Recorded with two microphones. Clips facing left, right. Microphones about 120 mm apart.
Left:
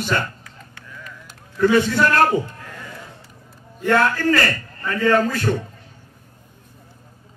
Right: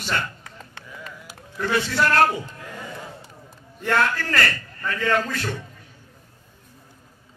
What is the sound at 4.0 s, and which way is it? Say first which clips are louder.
A man's voice: left 4 dB; 40° left (ahead or behind).